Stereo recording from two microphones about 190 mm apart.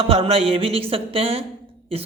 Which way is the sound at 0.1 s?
30° right (ahead or behind).